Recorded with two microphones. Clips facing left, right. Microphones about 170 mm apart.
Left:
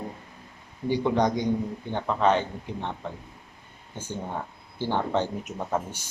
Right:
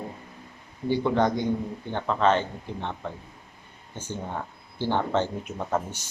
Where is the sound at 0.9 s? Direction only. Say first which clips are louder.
Even; 15° left (ahead or behind).